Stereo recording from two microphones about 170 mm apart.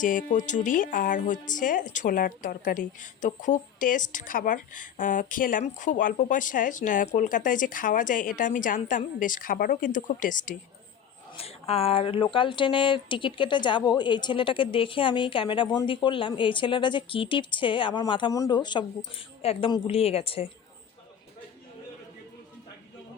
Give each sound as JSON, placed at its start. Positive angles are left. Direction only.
{"t": 0.0, "sound": "a woman's voice", "side_deg": 50}
{"t": 11.3, "sound": "speech", "side_deg": 35}